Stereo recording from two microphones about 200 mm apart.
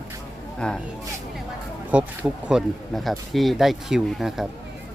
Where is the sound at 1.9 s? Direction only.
5° right (ahead or behind).